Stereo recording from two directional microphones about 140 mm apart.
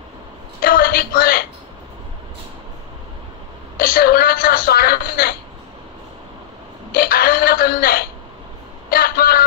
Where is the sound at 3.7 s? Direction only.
90° left.